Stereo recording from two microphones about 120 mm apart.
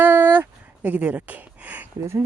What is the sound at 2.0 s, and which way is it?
Speech, 25° right (ahead or behind).